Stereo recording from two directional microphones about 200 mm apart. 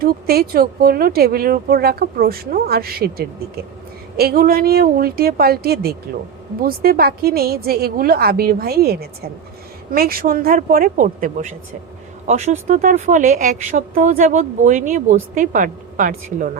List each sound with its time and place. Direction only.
0.0 s speech: 50° right (ahead or behind)